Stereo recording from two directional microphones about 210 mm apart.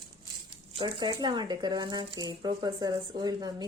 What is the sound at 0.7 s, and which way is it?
Speech, 20° right (ahead or behind).